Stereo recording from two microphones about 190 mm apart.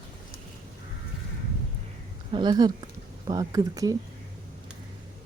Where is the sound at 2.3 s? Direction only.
25° right (ahead or behind).